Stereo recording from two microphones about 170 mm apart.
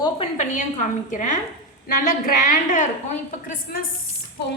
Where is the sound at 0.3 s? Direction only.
50° left (ahead or behind).